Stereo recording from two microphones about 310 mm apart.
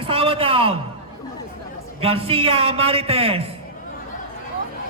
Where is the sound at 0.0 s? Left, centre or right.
Centre.